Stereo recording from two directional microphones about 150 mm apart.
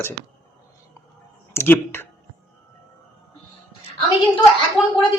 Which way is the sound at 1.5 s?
15° left (ahead or behind).